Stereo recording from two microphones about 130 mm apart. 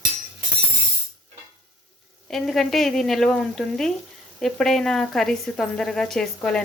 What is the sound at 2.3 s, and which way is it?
Speech, centre (ahead or behind).